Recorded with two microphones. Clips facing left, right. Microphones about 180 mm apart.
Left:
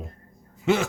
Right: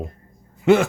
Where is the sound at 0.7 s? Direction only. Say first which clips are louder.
Right 7 dB; 55° right (ahead or behind).